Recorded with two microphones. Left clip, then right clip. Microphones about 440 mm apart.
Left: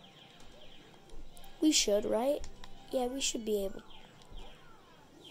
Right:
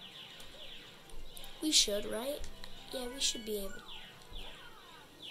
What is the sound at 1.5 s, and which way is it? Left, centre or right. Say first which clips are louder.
Speech: left 2 dB; centre.